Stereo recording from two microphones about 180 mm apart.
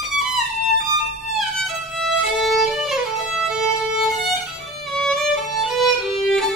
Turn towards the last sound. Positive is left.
turn(degrees=0)  # may be behind; listen again after turning